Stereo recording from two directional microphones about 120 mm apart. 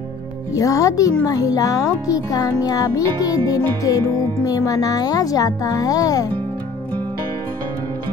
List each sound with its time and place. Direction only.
0.6 s music: 25° left (ahead or behind)